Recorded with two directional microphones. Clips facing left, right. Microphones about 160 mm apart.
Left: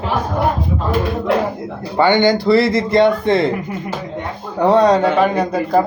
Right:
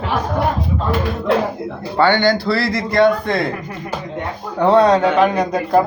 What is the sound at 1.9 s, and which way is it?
Speech, 15° left (ahead or behind).